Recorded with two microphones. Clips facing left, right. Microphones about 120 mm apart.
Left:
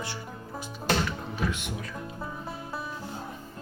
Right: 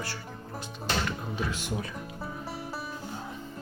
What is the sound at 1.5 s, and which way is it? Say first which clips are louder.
Speech: right 1 dB; 35° right (ahead or behind).